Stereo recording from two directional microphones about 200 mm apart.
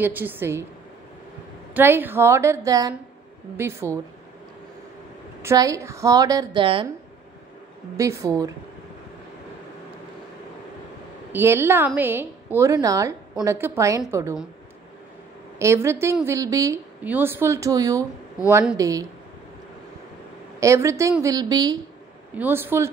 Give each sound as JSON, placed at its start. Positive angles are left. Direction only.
{"t": 0.0, "sound": "a woman's voice", "side_deg": -10}
{"t": 1.7, "sound": "a woman's voice", "side_deg": -10}
{"t": 5.4, "sound": "a woman's voice", "side_deg": -15}
{"t": 8.0, "sound": "a woman's voice", "side_deg": -15}
{"t": 11.3, "sound": "a woman's voice", "side_deg": -10}
{"t": 15.6, "sound": "a woman's voice", "side_deg": -15}
{"t": 20.6, "sound": "a woman's voice", "side_deg": -15}